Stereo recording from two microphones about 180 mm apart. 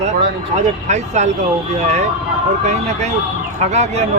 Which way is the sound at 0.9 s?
40° right (ahead or behind).